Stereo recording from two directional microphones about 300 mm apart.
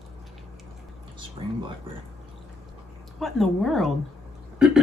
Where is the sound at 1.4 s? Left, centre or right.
Centre.